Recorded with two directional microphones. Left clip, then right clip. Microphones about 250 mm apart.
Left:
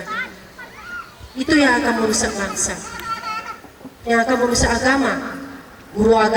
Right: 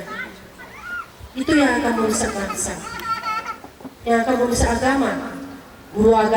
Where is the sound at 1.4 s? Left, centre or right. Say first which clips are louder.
Left 2 dB; centre.